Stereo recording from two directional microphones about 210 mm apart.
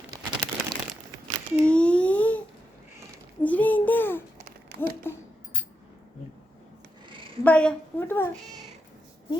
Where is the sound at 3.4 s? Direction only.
5° left (ahead or behind).